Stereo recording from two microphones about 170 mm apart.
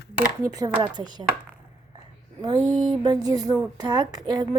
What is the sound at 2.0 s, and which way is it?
Whispering, 25° right (ahead or behind).